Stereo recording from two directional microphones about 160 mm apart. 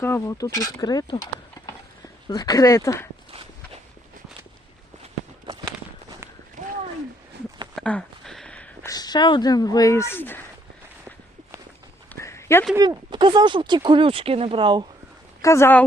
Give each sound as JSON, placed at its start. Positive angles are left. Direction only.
{"t": 0.0, "sound": "speech", "side_deg": 15}
{"t": 7.8, "sound": "a sound", "side_deg": 5}
{"t": 8.9, "sound": "speech", "side_deg": 25}
{"t": 12.0, "sound": "a sound", "side_deg": 15}
{"t": 12.7, "sound": "speech", "side_deg": -20}
{"t": 13.1, "sound": "speech", "side_deg": -30}
{"t": 15.4, "sound": "speech", "side_deg": 20}